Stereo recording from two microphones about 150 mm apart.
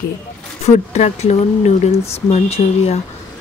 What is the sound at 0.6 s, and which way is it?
Speech, 50° left (ahead or behind).